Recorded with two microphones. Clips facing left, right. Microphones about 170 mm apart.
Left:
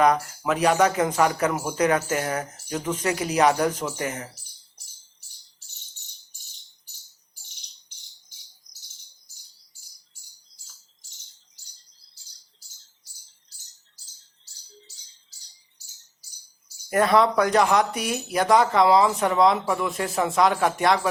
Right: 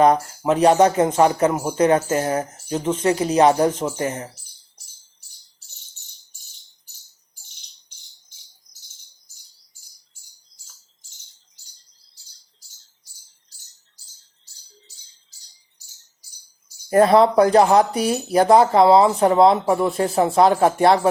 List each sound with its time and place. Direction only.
0.0 s speech: 30° right (ahead or behind)
16.9 s speech: 30° right (ahead or behind)